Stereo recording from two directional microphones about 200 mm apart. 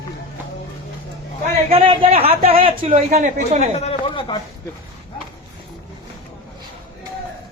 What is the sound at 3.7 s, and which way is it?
Speech, 30° left (ahead or behind).